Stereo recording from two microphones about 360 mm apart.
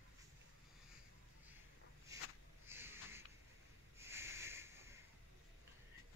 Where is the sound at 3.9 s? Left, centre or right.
Centre.